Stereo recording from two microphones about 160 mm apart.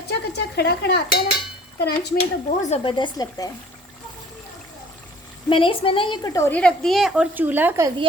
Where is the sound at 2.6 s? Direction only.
45° left (ahead or behind).